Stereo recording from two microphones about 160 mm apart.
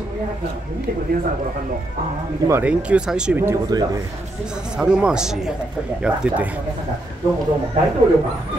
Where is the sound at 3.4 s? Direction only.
20° right (ahead or behind).